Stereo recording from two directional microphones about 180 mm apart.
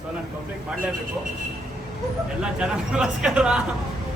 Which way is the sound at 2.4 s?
5° right (ahead or behind).